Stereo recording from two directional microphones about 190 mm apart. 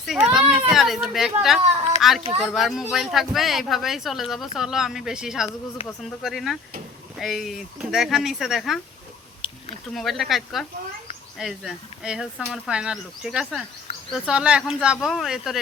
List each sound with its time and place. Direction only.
0.0 s a child's voice: 5° right (ahead or behind)
9.4 s a sound: 30° left (ahead or behind)
9.9 s speech: centre (ahead or behind)